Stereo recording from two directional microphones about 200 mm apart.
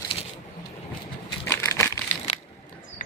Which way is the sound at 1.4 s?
10° left (ahead or behind).